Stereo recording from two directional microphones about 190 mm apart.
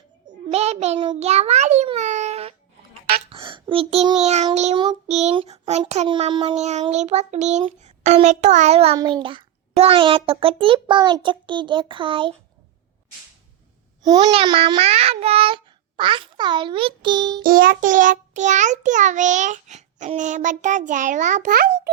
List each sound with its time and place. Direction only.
0.3 s a sound: 35° right (ahead or behind)
0.9 s child singing: 30° right (ahead or behind)
3.2 s a child's voice: 30° right (ahead or behind)
4.5 s child singing: 35° right (ahead or behind)
9.0 s a child's voice: 25° right (ahead or behind)
14.0 s a child's voice: 20° right (ahead or behind)
17.4 s child singing: 50° right (ahead or behind)